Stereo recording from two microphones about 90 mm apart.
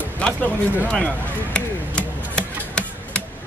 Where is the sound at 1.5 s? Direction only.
10° left (ahead or behind).